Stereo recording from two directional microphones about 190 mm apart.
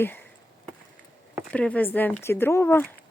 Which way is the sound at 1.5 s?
5° left (ahead or behind).